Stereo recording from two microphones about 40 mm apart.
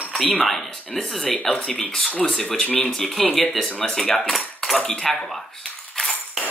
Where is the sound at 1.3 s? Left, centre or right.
Left.